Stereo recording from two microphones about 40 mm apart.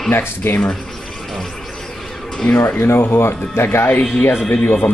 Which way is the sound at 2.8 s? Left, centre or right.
Left.